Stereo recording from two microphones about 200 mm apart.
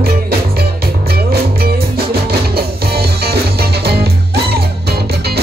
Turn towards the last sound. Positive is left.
turn(degrees=-55)  # may be behind; listen again after turning